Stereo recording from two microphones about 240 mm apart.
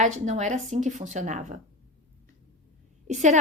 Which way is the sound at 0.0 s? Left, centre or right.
Right.